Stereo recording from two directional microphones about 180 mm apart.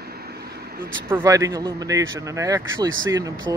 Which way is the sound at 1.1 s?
15° right (ahead or behind).